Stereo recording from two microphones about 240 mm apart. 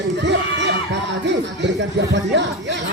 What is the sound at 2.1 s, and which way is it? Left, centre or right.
Speech, right.